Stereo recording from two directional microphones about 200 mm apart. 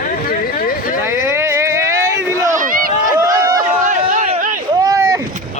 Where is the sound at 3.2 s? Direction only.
15° right (ahead or behind).